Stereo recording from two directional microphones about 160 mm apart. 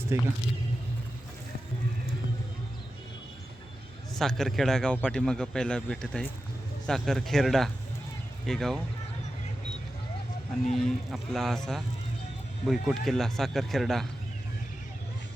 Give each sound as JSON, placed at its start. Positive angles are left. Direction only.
{"t": 0.1, "sound": "speech", "side_deg": -15}
{"t": 4.1, "sound": "speech", "side_deg": 0}
{"t": 10.8, "sound": "speech", "side_deg": 0}